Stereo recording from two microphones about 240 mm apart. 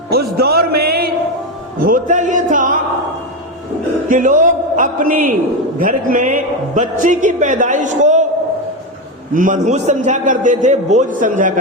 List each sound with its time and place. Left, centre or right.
0.1 s a man's voice: right
1.8 s music: right
4.1 s a man's voice: right
9.3 s a man's voice: right